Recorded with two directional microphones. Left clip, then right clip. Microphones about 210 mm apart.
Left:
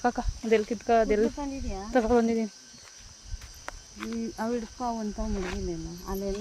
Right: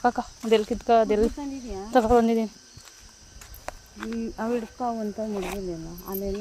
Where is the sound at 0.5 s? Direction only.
10° right (ahead or behind).